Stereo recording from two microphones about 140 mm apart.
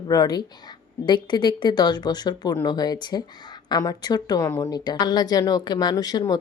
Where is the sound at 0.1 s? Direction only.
30° left (ahead or behind).